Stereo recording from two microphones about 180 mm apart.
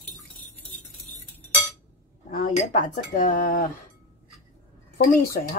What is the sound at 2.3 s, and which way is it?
Speech, 45° left (ahead or behind).